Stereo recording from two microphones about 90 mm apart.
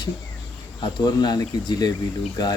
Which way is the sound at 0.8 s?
55° left (ahead or behind).